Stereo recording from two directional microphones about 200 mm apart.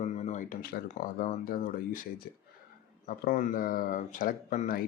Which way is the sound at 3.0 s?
45° left (ahead or behind).